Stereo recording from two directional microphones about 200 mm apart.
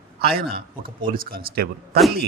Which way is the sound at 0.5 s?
45° right (ahead or behind).